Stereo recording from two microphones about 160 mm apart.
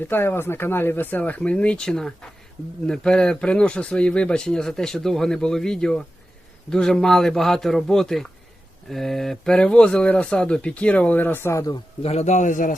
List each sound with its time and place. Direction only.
0.1 s speech: 15° left (ahead or behind)
12.0 s a man's voice: 45° left (ahead or behind)